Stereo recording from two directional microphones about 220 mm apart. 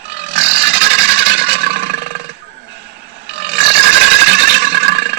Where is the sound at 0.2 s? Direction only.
50° right (ahead or behind).